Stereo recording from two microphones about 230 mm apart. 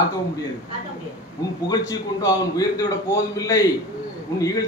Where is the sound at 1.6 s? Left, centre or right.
Centre.